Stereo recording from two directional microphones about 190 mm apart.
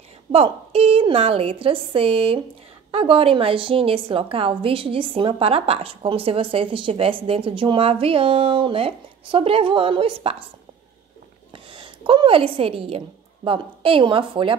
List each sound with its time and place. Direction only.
0.3 s a woman's voice: 30° right (ahead or behind)
11.5 s a woman's voice: 25° right (ahead or behind)